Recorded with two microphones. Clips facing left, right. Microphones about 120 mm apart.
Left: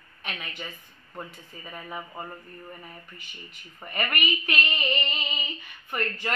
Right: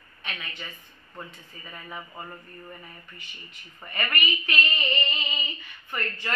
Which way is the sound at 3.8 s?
10° left (ahead or behind).